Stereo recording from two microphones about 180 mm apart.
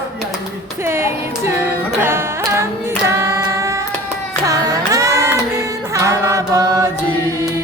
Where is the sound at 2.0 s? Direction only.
15° right (ahead or behind).